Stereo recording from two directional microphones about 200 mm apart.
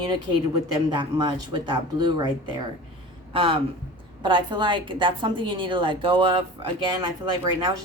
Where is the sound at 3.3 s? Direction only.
25° right (ahead or behind).